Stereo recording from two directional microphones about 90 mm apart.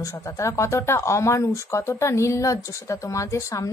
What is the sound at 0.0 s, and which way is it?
Speech, 35° left (ahead or behind).